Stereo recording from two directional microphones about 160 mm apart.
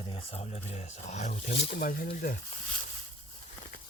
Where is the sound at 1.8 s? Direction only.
70° left (ahead or behind).